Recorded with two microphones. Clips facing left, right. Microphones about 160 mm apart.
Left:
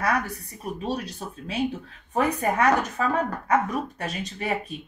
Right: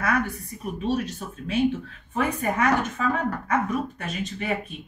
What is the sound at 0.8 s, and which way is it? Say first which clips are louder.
Speech: right 5 dB; 35° left (ahead or behind).